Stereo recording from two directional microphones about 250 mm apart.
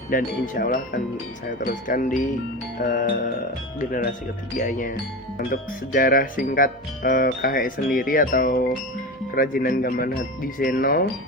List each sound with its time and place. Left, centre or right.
0.1 s speech: left